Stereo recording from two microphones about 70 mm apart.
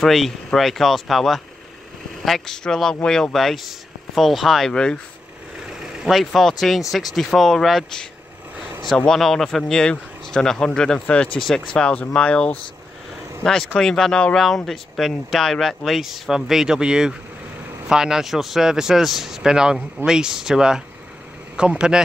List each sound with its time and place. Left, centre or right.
0.0 s speech: centre
5.9 s speech: centre